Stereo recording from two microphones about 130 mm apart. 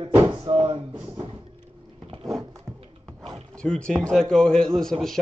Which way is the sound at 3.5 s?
5° left (ahead or behind).